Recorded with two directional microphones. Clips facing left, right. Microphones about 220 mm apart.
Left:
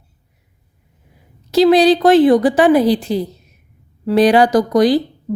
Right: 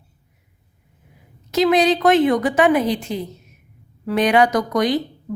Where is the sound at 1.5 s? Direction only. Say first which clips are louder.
Left 6 dB; 35° left (ahead or behind).